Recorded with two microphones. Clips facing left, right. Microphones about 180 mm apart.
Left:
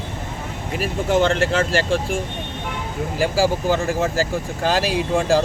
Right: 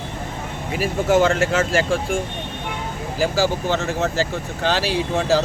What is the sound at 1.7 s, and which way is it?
Speech, centre (ahead or behind).